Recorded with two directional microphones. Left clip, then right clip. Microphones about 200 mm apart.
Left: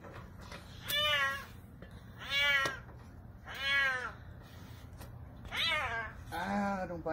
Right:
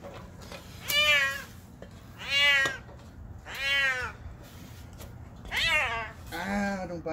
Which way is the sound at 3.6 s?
5° right (ahead or behind).